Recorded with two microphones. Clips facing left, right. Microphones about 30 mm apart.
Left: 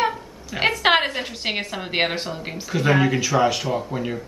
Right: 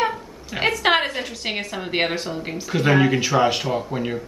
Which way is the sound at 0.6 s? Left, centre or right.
Centre.